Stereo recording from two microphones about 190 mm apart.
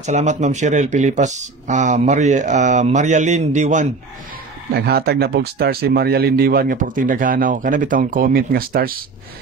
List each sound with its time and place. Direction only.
0.0 s speech: 40° right (ahead or behind)
4.7 s speech: 60° right (ahead or behind)